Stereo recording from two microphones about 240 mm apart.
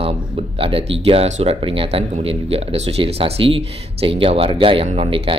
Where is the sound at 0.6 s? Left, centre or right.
Right.